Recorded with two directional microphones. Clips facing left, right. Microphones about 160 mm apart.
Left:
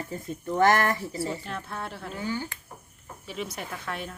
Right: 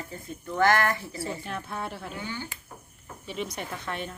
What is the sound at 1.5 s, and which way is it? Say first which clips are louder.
Speech: right 1 dB; 5° right (ahead or behind).